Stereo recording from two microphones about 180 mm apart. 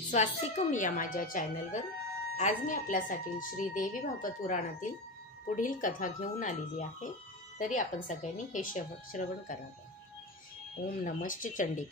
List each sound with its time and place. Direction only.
0.1 s speech: 40° left (ahead or behind)
10.9 s speech: 50° left (ahead or behind)